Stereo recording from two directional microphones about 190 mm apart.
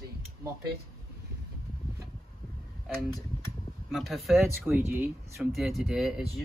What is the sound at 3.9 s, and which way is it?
Speech, centre (ahead or behind).